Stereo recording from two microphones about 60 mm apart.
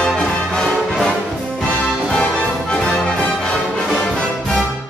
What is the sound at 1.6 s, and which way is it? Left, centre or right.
Music, centre.